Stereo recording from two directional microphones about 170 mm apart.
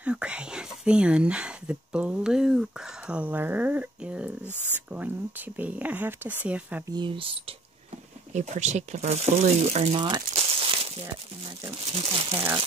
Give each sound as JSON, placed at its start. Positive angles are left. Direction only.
{"t": 0.0, "sound": "whispering", "side_deg": -5}
{"t": 4.5, "sound": "a sound", "side_deg": 10}
{"t": 4.9, "sound": "speech", "side_deg": -10}
{"t": 6.9, "sound": "speech", "side_deg": -30}
{"t": 8.3, "sound": "speech", "side_deg": -45}
{"t": 10.3, "sound": "crumpling", "side_deg": -35}
{"t": 11.6, "sound": "speech", "side_deg": -35}